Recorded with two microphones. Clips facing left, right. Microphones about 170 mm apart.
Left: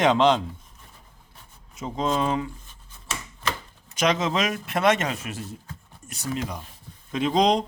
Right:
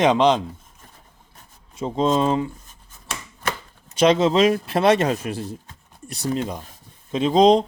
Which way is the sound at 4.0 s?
30° right (ahead or behind).